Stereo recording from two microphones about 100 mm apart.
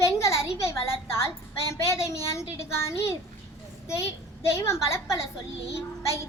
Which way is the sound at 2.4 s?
25° left (ahead or behind).